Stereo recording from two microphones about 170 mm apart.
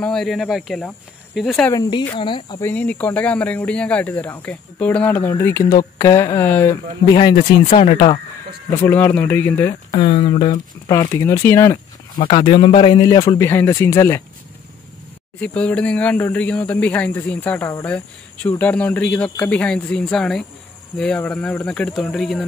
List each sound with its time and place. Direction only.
0.0 s speech: centre (ahead or behind)
1.7 s a man's voice: 25° left (ahead or behind)
2.6 s speech: 10° left (ahead or behind)
7.2 s speech: 30° left (ahead or behind)
8.8 s speech: 10° left (ahead or behind)
9.9 s speech: 35° left (ahead or behind)
10.9 s speech: 20° left (ahead or behind)
12.2 s a man's voice: 30° left (ahead or behind)
15.4 s speech: 5° left (ahead or behind)